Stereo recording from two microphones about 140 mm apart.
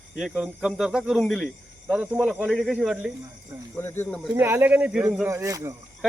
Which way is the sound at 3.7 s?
15° left (ahead or behind).